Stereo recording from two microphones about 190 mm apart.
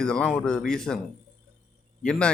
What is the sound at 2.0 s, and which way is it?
Speech, 5° left (ahead or behind).